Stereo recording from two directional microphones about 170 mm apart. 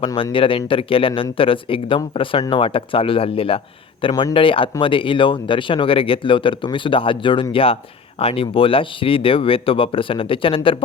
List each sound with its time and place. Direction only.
0.0 s speech: 30° left (ahead or behind)